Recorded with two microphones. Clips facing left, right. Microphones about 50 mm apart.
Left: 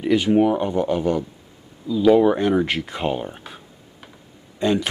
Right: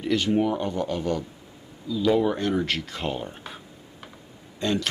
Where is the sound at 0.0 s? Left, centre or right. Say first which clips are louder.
Left 6 dB; centre.